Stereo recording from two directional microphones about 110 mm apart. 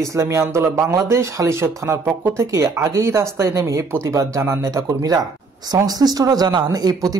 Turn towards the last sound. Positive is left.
turn(degrees=-35)  # may be behind; listen again after turning